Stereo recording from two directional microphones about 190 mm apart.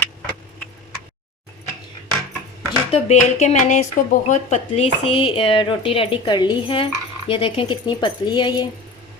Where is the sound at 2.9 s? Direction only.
35° left (ahead or behind).